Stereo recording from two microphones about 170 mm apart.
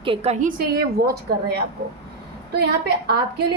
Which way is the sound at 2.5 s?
70° right (ahead or behind).